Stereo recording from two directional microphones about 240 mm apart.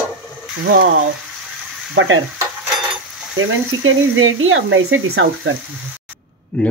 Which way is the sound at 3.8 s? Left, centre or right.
Right.